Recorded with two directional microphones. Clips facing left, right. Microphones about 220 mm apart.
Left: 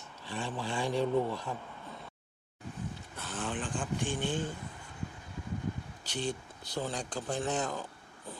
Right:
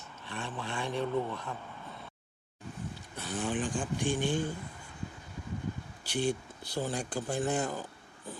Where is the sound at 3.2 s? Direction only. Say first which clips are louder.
Right 4 dB; 15° right (ahead or behind).